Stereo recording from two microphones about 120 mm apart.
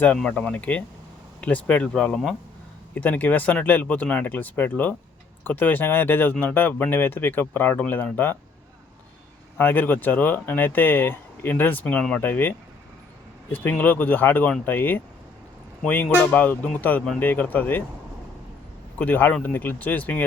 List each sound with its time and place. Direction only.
0.0 s speech: 10° left (ahead or behind)
9.6 s speech: 15° left (ahead or behind)
18.9 s speech: 15° left (ahead or behind)